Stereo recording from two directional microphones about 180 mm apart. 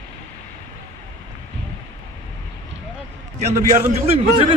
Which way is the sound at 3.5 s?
40° right (ahead or behind).